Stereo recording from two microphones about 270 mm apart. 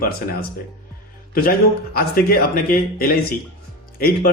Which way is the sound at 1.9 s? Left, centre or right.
Left.